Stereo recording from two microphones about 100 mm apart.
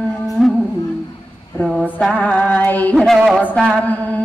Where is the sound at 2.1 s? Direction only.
15° left (ahead or behind).